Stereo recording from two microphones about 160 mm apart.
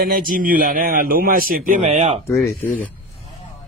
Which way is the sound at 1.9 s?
40° right (ahead or behind).